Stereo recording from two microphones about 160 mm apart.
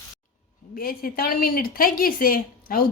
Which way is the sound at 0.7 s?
65° left (ahead or behind).